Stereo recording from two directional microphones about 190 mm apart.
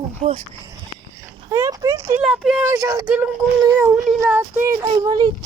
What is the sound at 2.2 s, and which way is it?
Speech, 5° right (ahead or behind).